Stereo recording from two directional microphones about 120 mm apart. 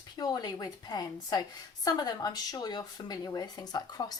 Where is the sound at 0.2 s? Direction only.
35° left (ahead or behind).